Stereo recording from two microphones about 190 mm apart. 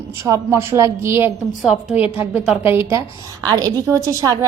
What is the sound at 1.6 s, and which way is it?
A woman's voice, 5° right (ahead or behind).